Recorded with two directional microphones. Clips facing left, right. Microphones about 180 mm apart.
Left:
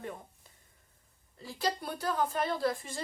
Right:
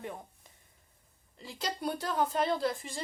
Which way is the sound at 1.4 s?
25° right (ahead or behind).